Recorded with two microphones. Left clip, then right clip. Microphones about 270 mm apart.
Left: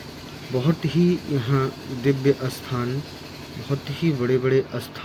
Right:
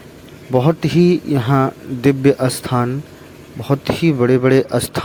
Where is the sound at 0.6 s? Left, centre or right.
Right.